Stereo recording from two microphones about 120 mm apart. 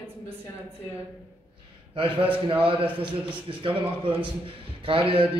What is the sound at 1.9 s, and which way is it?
A man's voice, 50° right (ahead or behind).